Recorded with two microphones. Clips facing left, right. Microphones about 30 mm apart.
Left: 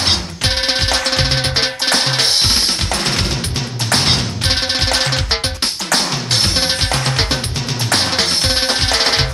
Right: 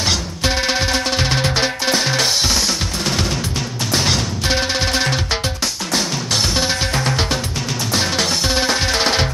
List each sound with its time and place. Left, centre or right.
0.0 s music: left
1.9 s drum: left
3.9 s music: left